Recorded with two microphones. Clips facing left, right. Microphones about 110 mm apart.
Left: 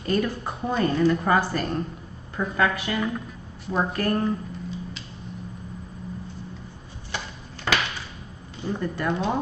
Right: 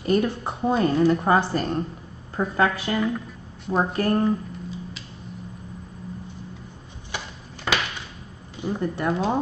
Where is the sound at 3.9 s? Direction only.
25° right (ahead or behind).